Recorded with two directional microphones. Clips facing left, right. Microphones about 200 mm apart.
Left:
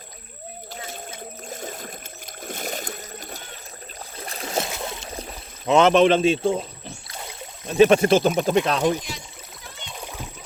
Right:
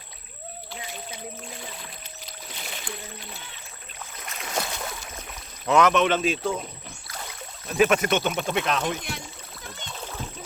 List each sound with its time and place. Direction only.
0.7 s boat: 45° left (ahead or behind)
5.6 s speech: 25° left (ahead or behind)